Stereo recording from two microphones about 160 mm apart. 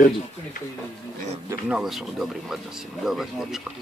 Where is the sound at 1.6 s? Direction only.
5° right (ahead or behind).